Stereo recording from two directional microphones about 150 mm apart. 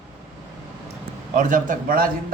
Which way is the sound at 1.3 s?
60° right (ahead or behind).